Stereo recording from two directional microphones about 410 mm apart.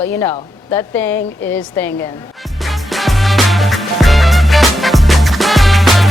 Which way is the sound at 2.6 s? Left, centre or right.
Centre.